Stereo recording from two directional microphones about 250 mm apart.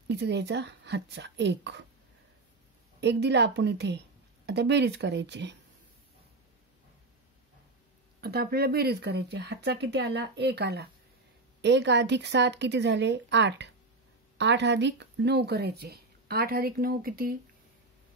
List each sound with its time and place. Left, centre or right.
0.1 s speech: right
3.0 s speech: right
8.2 s speech: right